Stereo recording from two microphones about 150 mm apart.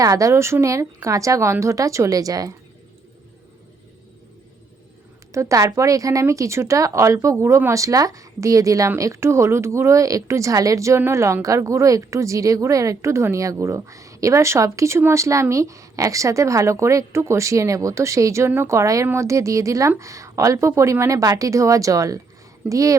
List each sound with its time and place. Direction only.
0.0 s speech: 20° right (ahead or behind)
5.3 s speech: 20° right (ahead or behind)